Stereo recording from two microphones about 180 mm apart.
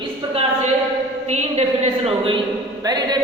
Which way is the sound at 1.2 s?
40° right (ahead or behind).